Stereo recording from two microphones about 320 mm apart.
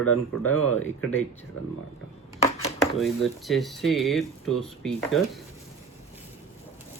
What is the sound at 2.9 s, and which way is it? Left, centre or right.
Speech, centre.